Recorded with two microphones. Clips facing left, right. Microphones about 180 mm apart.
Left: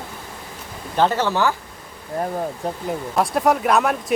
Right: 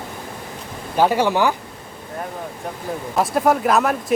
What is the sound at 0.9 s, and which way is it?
Speech, 10° right (ahead or behind).